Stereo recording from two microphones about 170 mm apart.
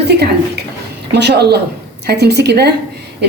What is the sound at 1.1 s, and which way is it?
Speech, 80° right.